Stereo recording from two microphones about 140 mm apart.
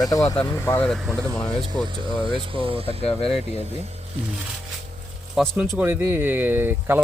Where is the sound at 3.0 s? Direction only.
45° left (ahead or behind).